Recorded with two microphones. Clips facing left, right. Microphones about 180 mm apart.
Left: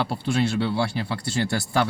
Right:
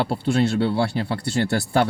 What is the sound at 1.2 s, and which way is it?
Speech, 55° right (ahead or behind).